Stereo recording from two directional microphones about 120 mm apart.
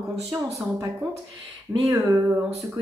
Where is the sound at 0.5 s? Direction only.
25° right (ahead or behind).